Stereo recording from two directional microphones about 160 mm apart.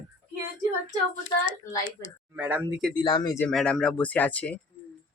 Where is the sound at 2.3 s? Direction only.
15° right (ahead or behind).